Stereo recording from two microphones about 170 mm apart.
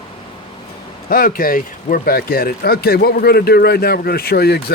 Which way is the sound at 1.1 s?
60° left (ahead or behind).